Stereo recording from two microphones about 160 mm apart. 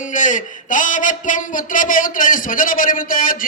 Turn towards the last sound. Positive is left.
turn(degrees=60)  # may be behind; listen again after turning